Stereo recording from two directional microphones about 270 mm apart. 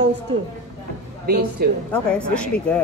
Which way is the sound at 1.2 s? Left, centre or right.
Right.